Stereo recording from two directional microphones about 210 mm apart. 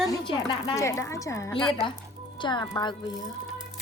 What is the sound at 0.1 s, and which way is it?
A woman's voice, 15° left (ahead or behind).